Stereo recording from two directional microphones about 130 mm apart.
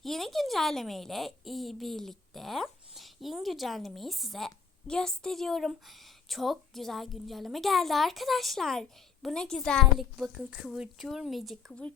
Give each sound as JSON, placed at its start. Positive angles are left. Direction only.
{"t": 0.0, "sound": "a woman's voice", "side_deg": 0}